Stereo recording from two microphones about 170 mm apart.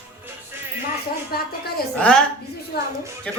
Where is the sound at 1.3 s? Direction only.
60° left (ahead or behind).